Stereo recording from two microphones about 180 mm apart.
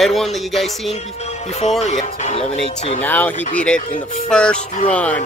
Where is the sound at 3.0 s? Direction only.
10° left (ahead or behind).